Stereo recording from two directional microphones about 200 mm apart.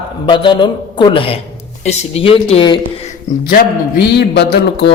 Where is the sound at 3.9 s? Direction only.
55° left (ahead or behind).